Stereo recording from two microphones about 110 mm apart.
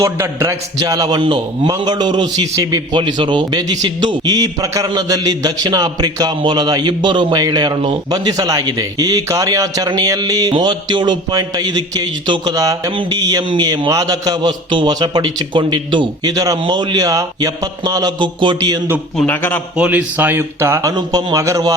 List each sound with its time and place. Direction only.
0.0 s a man's voice: 25° right (ahead or behind)
1.2 s a man's voice: 50° right (ahead or behind); by 12.9 s 35° right (ahead or behind)
12.9 s a man's voice: 45° right (ahead or behind)
19.1 s a man's voice: 15° left (ahead or behind)
19.7 s speech: 10° right (ahead or behind)
20.9 s a man's voice: 40° right (ahead or behind)